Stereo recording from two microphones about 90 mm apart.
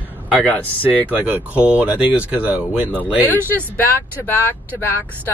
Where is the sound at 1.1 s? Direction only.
15° right (ahead or behind).